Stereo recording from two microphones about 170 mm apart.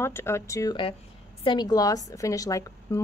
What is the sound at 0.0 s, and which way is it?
A woman's voice, 15° left (ahead or behind).